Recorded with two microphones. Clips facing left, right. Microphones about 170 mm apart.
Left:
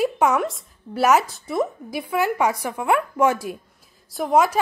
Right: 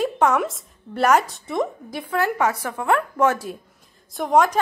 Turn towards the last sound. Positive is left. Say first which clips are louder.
# even
turn(degrees=5)  # may be behind; listen again after turning